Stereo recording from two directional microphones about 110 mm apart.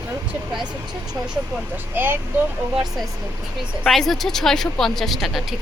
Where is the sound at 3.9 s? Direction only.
Centre (ahead or behind).